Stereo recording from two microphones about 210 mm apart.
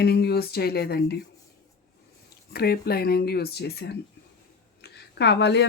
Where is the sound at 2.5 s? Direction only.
45° left (ahead or behind).